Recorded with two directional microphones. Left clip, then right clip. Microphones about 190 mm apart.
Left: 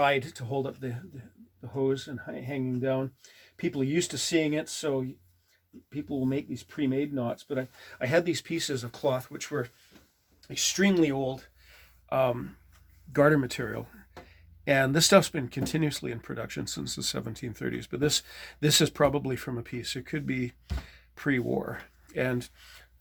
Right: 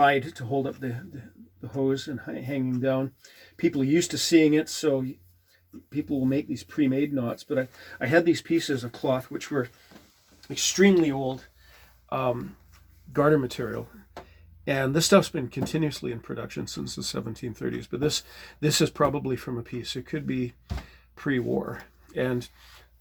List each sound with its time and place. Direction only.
0.0 s speech: 50° left (ahead or behind)
1.8 s speech: 30° left (ahead or behind)
7.9 s speech: 45° left (ahead or behind)
10.5 s speech: 35° left (ahead or behind)